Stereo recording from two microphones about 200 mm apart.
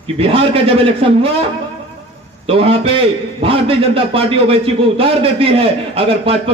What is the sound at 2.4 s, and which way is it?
A man's voice, 30° right (ahead or behind).